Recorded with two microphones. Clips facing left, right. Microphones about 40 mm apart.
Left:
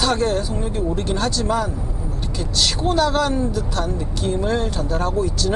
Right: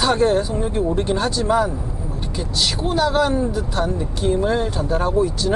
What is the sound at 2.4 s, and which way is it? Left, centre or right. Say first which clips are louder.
Speech: left 1 dB; centre.